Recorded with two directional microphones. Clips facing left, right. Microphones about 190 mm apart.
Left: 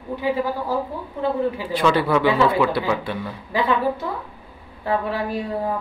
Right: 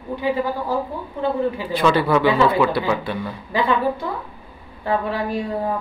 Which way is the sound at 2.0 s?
35° right (ahead or behind).